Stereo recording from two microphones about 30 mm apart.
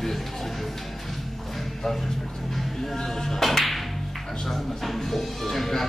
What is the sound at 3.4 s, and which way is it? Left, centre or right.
Music, centre.